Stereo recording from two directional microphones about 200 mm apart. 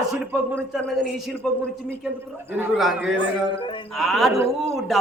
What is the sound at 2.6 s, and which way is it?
A man's voice, centre (ahead or behind).